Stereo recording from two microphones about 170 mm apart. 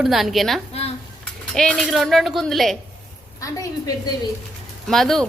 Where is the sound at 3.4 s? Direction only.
20° left (ahead or behind).